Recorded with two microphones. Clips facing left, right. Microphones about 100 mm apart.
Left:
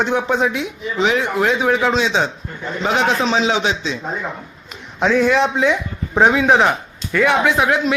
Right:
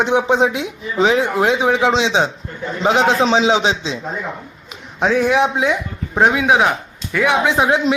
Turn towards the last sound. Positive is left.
turn(degrees=-20)  # may be behind; listen again after turning